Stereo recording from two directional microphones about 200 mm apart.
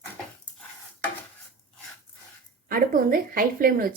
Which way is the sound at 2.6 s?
45° right (ahead or behind).